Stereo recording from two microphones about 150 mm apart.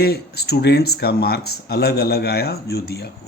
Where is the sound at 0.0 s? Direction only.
90° left.